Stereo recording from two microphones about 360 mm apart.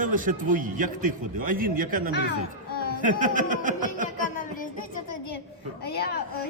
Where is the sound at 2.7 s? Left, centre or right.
Left.